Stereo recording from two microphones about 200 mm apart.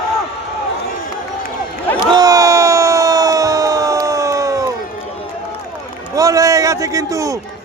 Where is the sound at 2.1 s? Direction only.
15° right (ahead or behind).